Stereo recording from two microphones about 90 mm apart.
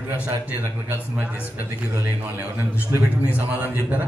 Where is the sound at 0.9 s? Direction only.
20° right (ahead or behind).